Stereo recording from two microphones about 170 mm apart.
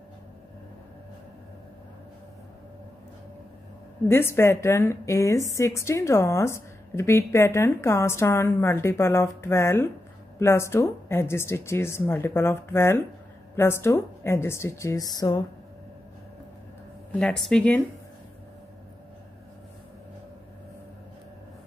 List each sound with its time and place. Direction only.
4.1 s a woman's voice: 15° left (ahead or behind)
17.2 s speech: 5° left (ahead or behind)